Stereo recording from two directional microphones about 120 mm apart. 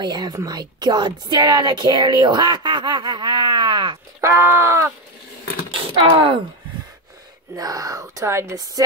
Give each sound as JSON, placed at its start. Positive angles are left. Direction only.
{"t": 0.0, "sound": "a woman's voice", "side_deg": -35}
{"t": 4.2, "sound": "speech", "side_deg": -25}
{"t": 5.7, "sound": "speech", "side_deg": -50}
{"t": 7.5, "sound": "speech", "side_deg": -30}